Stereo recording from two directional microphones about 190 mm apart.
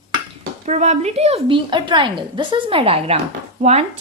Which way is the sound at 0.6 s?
35° right (ahead or behind).